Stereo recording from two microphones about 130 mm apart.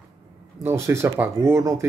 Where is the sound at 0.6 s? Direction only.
20° right (ahead or behind).